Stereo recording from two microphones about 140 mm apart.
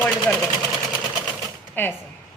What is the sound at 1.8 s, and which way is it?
Speech, 15° left (ahead or behind).